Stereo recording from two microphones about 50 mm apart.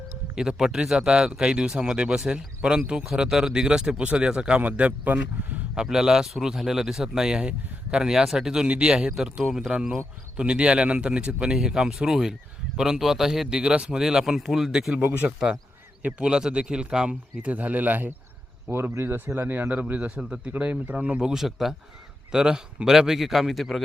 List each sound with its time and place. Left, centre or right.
0.3 s a man's voice: centre; by 5.5 s right
5.7 s a man's voice: centre
8.6 s speech: right
9.0 s a man's voice: centre
10.3 s speech: centre
11.5 s a man's voice: centre
13.6 s a man's voice: centre
16.2 s a man's voice: centre
17.5 s speech: right
18.7 s speech: right
19.4 s speech: right
20.5 s speech: right
21.3 s a man's voice: centre